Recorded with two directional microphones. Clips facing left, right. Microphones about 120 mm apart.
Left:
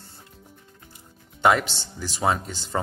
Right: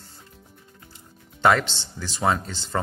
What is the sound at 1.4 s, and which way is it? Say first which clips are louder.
Speech: even; 15° left (ahead or behind).